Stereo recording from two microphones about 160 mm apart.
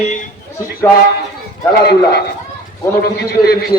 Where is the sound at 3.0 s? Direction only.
75° left (ahead or behind).